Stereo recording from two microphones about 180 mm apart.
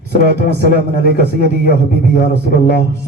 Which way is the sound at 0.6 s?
60° left (ahead or behind).